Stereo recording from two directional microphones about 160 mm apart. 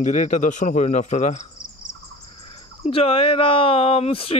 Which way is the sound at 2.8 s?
35° left (ahead or behind).